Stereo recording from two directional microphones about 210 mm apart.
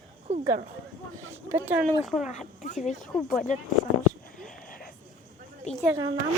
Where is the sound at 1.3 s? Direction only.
10° right (ahead or behind).